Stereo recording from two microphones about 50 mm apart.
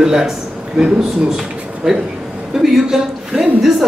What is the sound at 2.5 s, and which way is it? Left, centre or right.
A man's voice, centre.